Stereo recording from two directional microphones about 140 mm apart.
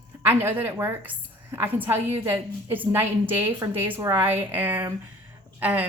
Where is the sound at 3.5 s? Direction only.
20° right (ahead or behind).